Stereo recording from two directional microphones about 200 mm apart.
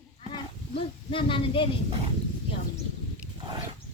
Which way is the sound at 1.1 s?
25° left (ahead or behind).